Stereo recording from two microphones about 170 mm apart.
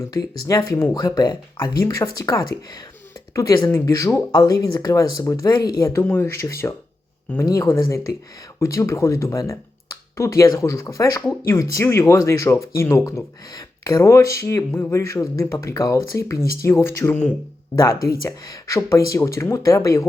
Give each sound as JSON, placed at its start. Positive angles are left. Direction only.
{"t": 0.4, "sound": "speech", "side_deg": 20}
{"t": 3.7, "sound": "speech", "side_deg": 15}